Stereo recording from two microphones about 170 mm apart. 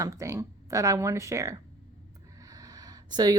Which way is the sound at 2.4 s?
20° right (ahead or behind).